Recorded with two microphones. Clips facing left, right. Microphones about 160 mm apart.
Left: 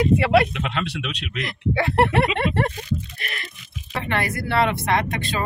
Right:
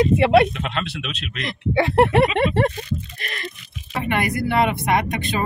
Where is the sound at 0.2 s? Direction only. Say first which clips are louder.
Right 3 dB; 25° right (ahead or behind).